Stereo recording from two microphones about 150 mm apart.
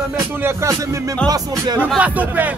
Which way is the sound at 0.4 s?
15° right (ahead or behind).